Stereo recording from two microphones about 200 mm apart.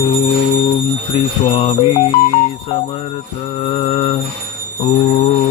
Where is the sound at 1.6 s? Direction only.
30° left (ahead or behind).